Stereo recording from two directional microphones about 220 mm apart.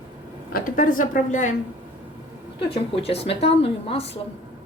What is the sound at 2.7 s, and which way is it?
A woman's voice, 25° left (ahead or behind).